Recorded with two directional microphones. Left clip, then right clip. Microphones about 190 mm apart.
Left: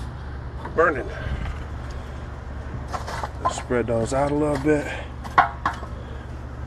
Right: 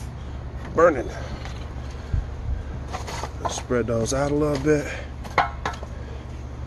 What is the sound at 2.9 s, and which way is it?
Vehicle, 25° right (ahead or behind).